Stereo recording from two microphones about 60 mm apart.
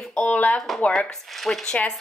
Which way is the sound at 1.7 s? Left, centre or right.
Left.